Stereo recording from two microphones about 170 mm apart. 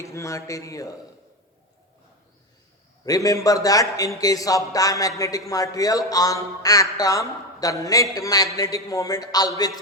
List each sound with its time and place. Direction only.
0.0 s a man's voice: 20° left (ahead or behind)
3.1 s a man's voice: 20° left (ahead or behind)